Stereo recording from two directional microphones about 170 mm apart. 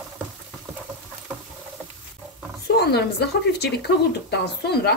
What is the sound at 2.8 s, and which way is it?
Speech, 70° left (ahead or behind).